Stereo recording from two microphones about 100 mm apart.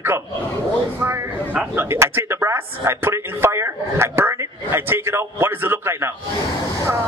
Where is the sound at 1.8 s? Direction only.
25° right (ahead or behind).